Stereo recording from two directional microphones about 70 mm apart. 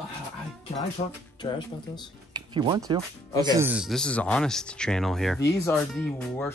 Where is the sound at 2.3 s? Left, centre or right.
Right.